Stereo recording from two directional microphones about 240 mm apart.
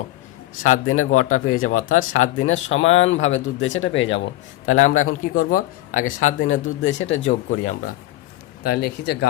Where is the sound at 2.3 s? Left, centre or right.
Left.